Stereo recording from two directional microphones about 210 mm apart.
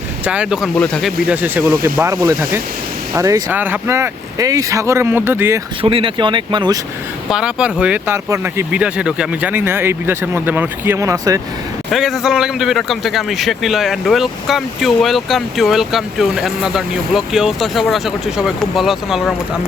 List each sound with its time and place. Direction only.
0.3 s a man's voice: 5° right (ahead or behind)
5.8 s speech: 25° right (ahead or behind)
7.3 s speech: 5° right (ahead or behind)
11.9 s a man's voice: centre (ahead or behind)